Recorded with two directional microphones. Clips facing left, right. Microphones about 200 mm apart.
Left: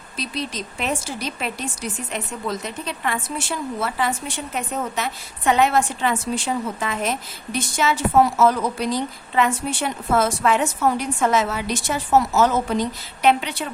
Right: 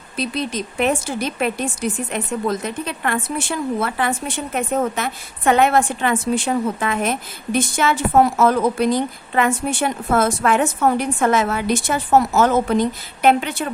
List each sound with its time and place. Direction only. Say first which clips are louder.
0.2 s a woman's voice: right 5 dB; 55° right (ahead or behind)